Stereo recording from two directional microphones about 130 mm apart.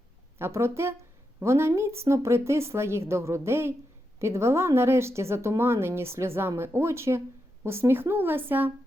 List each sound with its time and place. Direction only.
0.3 s speech: 20° right (ahead or behind)